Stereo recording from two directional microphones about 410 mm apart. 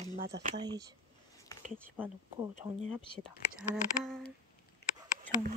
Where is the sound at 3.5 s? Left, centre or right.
Centre.